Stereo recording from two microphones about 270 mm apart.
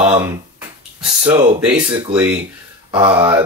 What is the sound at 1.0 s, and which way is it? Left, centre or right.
Speech, centre.